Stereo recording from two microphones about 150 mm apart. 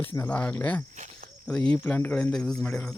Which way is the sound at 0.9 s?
50° right (ahead or behind).